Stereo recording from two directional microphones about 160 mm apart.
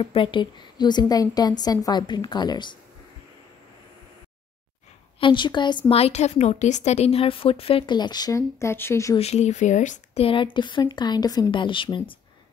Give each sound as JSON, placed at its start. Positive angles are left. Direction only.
{"t": 0.0, "sound": "a woman's voice", "side_deg": 35}
{"t": 5.2, "sound": "a woman's voice", "side_deg": 30}
{"t": 9.1, "sound": "speech", "side_deg": 40}
{"t": 10.2, "sound": "a woman's voice", "side_deg": 30}